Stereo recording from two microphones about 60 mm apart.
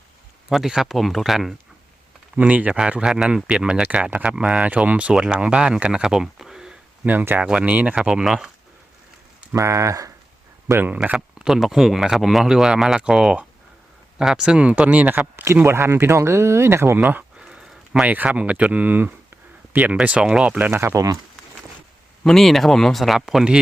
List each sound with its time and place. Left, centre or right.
0.5 s speech: centre
2.3 s speech: right; by 6.7 s centre
7.0 s speech: right; by 8.4 s centre
9.6 s speech: right
10.7 s speech: right
10.9 s speech: right
11.3 s speech: centre; by 17.2 s right
17.3 s a sound: centre
18.0 s speech: right
19.9 s speech: centre
20.6 s speech: right
20.9 s speech: right
22.2 s speech: centre